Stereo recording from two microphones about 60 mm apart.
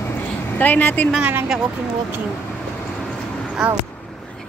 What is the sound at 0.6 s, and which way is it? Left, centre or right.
Speech, left.